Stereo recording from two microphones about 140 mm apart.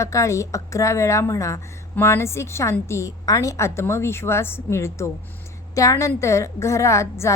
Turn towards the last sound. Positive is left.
turn(degrees=20)  # may be behind; listen again after turning